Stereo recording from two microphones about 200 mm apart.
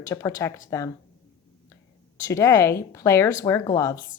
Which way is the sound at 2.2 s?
15° left (ahead or behind).